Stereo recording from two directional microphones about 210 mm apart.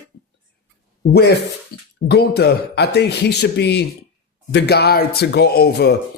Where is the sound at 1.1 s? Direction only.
50° left (ahead or behind).